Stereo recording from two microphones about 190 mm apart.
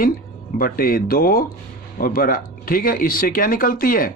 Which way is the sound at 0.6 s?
50° left (ahead or behind).